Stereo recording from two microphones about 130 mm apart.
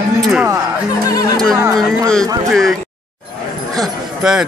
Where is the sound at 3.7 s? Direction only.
Centre (ahead or behind).